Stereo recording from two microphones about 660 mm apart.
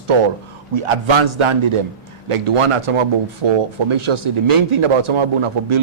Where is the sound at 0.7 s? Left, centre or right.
Right.